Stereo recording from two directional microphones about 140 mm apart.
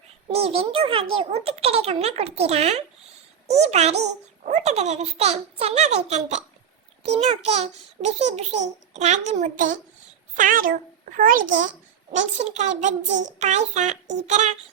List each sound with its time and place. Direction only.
0.3 s a child's voice: 45° right (ahead or behind)